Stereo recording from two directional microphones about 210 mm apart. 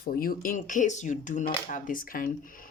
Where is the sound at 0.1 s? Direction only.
45° left (ahead or behind).